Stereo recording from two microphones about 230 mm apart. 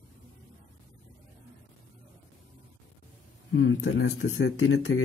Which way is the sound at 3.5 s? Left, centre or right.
Left.